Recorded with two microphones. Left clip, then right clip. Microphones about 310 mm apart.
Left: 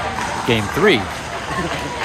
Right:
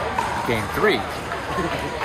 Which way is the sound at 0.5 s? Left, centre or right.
Left.